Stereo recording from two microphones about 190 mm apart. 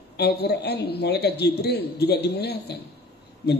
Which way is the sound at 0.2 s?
60° left (ahead or behind).